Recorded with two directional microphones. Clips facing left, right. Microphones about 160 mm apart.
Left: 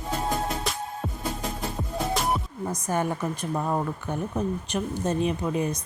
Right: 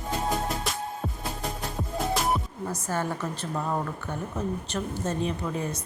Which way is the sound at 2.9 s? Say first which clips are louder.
Left 3 dB; 15° left (ahead or behind).